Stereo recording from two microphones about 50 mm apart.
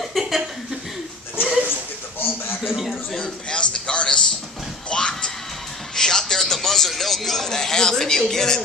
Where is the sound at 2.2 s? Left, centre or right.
Left.